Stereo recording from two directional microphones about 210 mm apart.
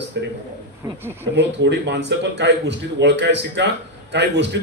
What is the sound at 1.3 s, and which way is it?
A man's voice, 55° right (ahead or behind).